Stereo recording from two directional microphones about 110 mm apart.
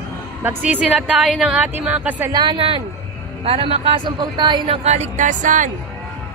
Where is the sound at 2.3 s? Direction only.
50° right (ahead or behind).